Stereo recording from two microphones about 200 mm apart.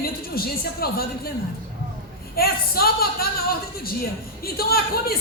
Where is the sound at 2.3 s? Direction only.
50° left (ahead or behind).